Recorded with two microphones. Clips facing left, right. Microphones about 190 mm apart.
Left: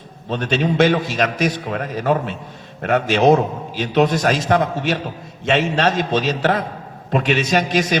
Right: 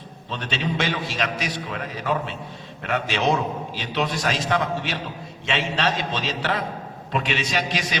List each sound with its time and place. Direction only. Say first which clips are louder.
0.3 s a man's voice: left 8 dB; 45° left (ahead or behind)